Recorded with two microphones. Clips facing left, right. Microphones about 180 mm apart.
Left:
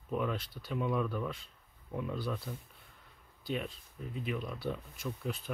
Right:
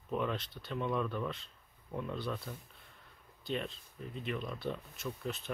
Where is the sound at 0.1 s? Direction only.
5° left (ahead or behind).